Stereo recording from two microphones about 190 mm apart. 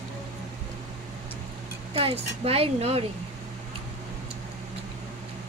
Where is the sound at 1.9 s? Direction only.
30° right (ahead or behind).